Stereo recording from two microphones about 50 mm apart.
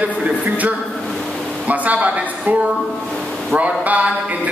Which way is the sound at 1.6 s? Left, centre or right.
Right.